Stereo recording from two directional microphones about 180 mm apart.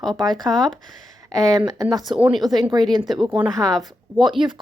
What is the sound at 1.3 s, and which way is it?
Speech, 20° right (ahead or behind).